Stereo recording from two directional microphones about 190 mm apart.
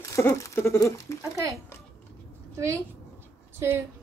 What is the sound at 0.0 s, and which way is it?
Patter, 15° left (ahead or behind).